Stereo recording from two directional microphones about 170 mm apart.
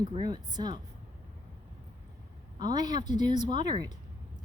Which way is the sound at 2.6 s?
25° right (ahead or behind).